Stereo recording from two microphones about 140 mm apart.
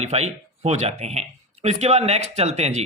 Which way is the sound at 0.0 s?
50° right (ahead or behind).